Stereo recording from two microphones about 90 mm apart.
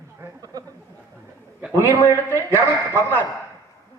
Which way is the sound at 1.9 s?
30° left (ahead or behind).